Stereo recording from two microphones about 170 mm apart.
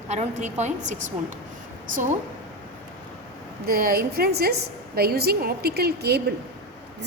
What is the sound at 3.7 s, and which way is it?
A woman's voice, 60° right (ahead or behind).